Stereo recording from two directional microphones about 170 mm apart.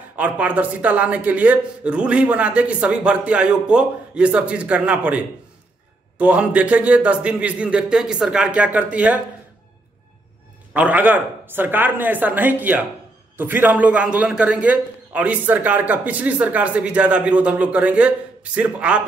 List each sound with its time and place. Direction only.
0.1 s a man's voice: 10° right (ahead or behind)
10.7 s a man's voice: 10° right (ahead or behind)